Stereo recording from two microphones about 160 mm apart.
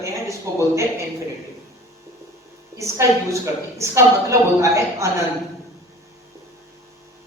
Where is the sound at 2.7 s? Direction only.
20° right (ahead or behind).